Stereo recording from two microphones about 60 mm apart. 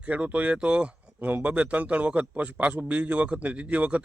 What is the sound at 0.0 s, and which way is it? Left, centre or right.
Speech, right.